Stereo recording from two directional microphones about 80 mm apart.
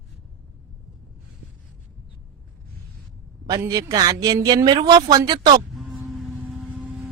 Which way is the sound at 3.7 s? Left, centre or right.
Right.